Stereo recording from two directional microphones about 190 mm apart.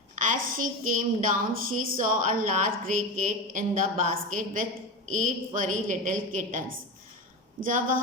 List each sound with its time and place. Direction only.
0.2 s a woman's voice: 45° right (ahead or behind)
7.6 s a woman's voice: 45° right (ahead or behind)